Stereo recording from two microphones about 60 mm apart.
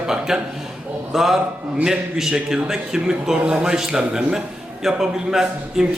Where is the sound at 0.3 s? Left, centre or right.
Centre.